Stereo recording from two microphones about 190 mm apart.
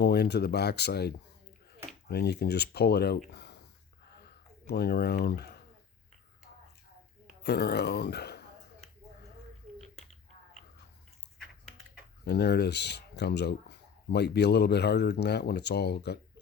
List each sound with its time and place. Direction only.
0.0 s speech: 60° left (ahead or behind)
4.6 s speech: 60° left (ahead or behind)
7.4 s speech: 60° left (ahead or behind)
12.2 s speech: 60° left (ahead or behind)